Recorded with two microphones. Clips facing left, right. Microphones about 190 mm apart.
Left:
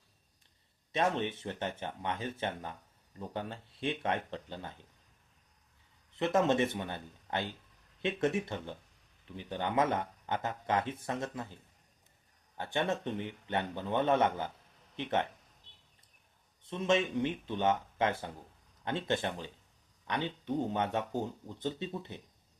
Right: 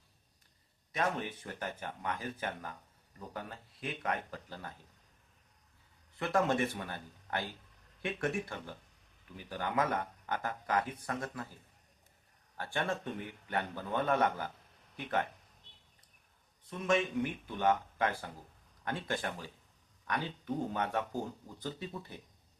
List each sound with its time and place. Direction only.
0.9 s speech: 25° left (ahead or behind)
6.1 s speech: 20° left (ahead or behind)
12.5 s speech: 20° left (ahead or behind)
16.6 s speech: 25° left (ahead or behind)